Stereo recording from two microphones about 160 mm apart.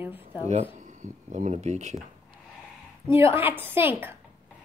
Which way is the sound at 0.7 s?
50° right (ahead or behind).